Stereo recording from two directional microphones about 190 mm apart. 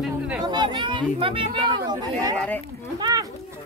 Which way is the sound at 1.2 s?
25° right (ahead or behind).